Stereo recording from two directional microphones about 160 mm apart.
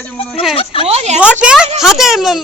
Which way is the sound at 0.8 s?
40° right (ahead or behind).